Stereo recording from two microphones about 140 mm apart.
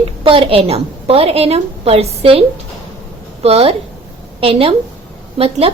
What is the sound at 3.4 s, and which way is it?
A woman's voice, 45° right (ahead or behind).